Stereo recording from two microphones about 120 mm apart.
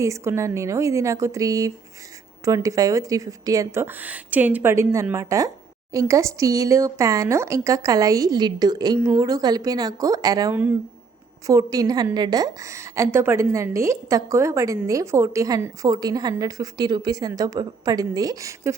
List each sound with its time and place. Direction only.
0.0 s speech: 25° right (ahead or behind)
3.8 s speech: 15° right (ahead or behind); by 10.5 s 30° right (ahead or behind)
10.5 s speech: 15° right (ahead or behind)
11.4 s a woman's voice: 30° right (ahead or behind)